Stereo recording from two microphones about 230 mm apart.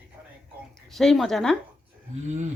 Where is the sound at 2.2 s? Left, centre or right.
Right.